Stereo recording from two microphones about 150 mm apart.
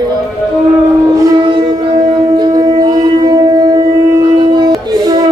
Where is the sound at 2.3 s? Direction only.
25° right (ahead or behind).